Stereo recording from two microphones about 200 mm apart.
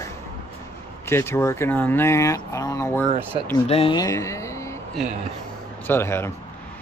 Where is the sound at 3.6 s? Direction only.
30° left (ahead or behind).